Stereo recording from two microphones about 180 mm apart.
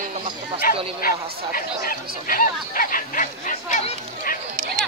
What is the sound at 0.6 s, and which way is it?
Speech, 55° left (ahead or behind).